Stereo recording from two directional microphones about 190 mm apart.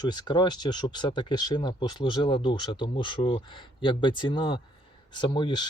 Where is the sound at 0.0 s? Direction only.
20° left (ahead or behind).